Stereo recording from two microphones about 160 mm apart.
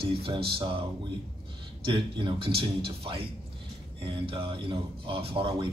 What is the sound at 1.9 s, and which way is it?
Speech, 30° right (ahead or behind).